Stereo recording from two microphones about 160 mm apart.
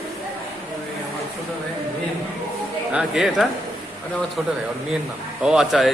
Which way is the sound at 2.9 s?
Centre (ahead or behind).